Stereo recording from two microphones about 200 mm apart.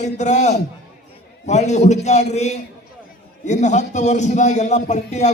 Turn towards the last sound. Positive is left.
turn(degrees=35)  # may be behind; listen again after turning